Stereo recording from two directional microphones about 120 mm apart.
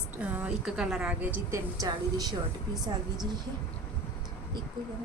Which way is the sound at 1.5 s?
30° right (ahead or behind).